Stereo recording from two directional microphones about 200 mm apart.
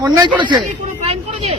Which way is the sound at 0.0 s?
15° right (ahead or behind).